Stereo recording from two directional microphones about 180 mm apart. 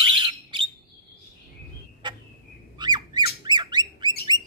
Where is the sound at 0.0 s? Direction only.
25° right (ahead or behind).